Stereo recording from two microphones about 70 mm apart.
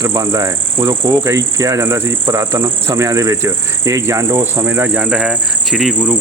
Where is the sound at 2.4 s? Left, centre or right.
Right.